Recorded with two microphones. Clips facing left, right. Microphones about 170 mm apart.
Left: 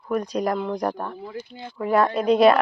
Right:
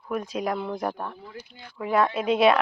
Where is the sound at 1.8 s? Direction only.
Centre (ahead or behind).